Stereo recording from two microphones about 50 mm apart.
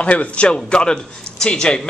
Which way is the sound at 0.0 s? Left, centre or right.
Left.